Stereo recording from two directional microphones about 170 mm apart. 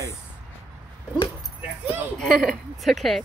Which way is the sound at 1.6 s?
10° right (ahead or behind).